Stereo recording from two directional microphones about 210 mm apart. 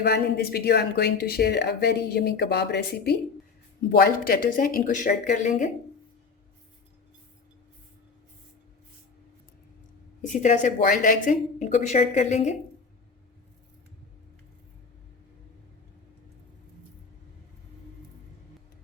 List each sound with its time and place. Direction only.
0.0 s speech: 50° left (ahead or behind)
10.2 s speech: 35° left (ahead or behind)